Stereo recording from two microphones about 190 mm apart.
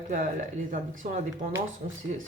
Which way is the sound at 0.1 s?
45° right (ahead or behind).